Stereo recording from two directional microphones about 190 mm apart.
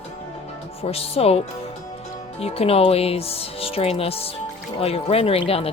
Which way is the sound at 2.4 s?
30° left (ahead or behind).